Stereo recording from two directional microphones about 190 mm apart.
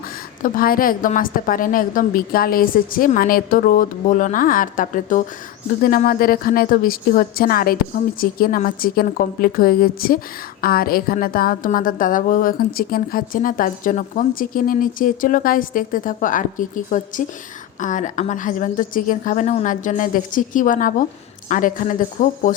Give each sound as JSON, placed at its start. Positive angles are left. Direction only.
{"t": 0.4, "sound": "a woman's voice", "side_deg": 50}